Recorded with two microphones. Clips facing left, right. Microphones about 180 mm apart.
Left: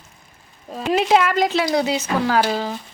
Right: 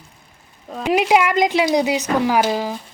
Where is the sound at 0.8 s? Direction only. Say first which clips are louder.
Right 1 dB; 15° right (ahead or behind).